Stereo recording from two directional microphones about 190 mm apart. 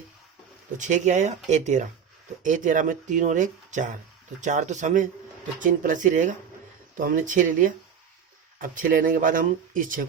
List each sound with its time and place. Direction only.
0.8 s speech: 40° right (ahead or behind)